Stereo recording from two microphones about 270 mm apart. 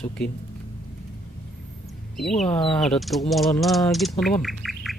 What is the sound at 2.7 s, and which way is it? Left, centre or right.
Speech, centre.